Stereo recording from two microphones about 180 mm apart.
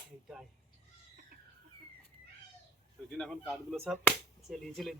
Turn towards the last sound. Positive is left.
turn(degrees=0)  # may be behind; listen again after turning